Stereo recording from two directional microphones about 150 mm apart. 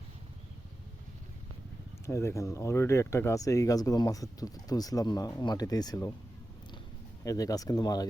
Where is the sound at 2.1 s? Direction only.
20° left (ahead or behind).